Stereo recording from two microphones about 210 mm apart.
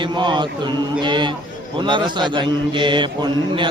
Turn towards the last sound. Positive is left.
turn(degrees=-20)  # may be behind; listen again after turning